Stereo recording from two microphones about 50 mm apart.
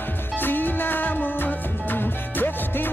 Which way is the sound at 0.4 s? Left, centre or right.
Left.